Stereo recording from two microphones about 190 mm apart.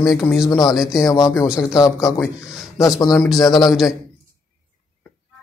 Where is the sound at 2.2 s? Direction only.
Centre (ahead or behind).